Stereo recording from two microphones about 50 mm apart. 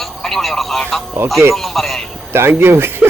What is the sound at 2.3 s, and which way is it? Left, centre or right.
Speech, right.